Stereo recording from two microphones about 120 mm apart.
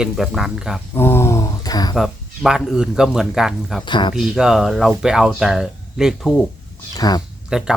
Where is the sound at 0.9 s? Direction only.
20° left (ahead or behind).